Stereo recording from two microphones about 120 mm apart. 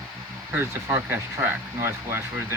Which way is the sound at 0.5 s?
20° right (ahead or behind).